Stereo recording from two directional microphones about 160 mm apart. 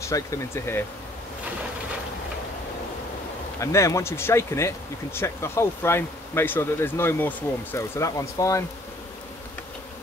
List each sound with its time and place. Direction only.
0.1 s speech: 20° left (ahead or behind)
3.5 s speech: 20° left (ahead or behind)